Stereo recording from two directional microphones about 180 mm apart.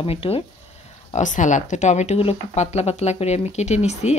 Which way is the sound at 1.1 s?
45° left (ahead or behind).